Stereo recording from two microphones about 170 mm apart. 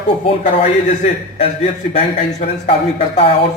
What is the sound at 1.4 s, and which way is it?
A man's voice, 35° left (ahead or behind).